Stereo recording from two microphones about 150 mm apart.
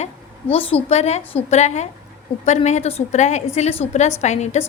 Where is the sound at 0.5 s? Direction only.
40° left (ahead or behind).